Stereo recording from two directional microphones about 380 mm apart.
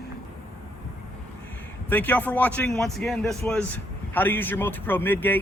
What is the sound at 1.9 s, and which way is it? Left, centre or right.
A man's voice, centre.